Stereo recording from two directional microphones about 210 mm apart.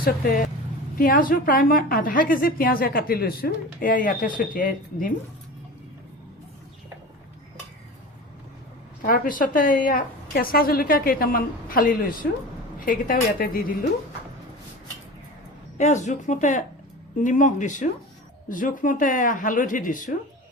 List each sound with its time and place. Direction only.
0.0 s a woman's voice: 40° left (ahead or behind)
9.0 s a woman's voice: 40° left (ahead or behind)
15.8 s speech: 35° left (ahead or behind)